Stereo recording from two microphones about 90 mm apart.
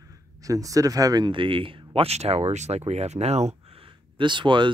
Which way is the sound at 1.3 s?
70° right (ahead or behind).